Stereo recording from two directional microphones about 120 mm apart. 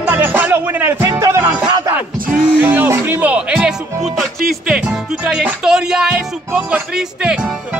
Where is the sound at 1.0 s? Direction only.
25° right (ahead or behind).